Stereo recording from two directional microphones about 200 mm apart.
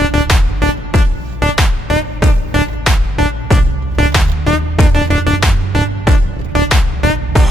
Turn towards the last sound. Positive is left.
turn(degrees=0)  # may be behind; listen again after turning